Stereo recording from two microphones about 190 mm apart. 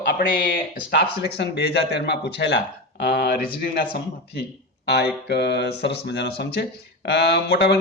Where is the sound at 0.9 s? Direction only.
60° left (ahead or behind).